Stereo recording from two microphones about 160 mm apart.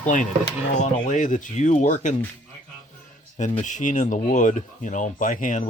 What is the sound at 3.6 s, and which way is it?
Speech, 50° left (ahead or behind).